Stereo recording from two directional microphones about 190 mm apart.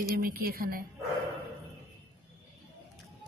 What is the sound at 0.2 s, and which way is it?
Speech, 50° right (ahead or behind).